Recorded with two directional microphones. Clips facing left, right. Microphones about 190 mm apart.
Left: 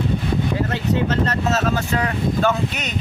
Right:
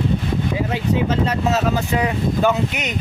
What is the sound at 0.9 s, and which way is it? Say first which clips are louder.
Speech: right 1 dB; 10° right (ahead or behind).